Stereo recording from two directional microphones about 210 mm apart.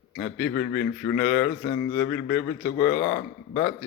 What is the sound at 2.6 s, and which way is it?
Speech, 55° left (ahead or behind).